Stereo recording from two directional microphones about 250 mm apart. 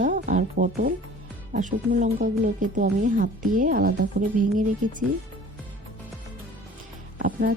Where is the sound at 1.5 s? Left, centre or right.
Right.